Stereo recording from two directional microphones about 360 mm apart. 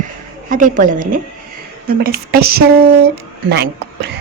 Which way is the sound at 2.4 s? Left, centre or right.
Right.